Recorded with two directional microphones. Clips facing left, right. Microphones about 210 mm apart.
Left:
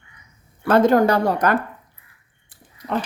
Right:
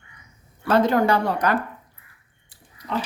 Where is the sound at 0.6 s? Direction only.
50° left (ahead or behind).